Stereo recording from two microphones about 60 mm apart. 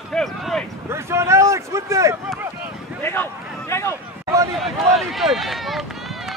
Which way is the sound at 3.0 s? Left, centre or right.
Left.